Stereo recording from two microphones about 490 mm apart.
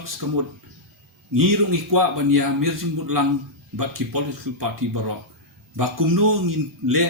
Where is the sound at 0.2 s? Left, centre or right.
Right.